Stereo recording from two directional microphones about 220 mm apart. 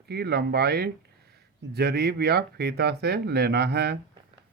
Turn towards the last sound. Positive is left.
turn(degrees=-50)  # may be behind; listen again after turning